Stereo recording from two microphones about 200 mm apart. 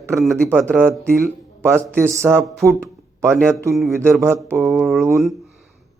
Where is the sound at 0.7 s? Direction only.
10° right (ahead or behind).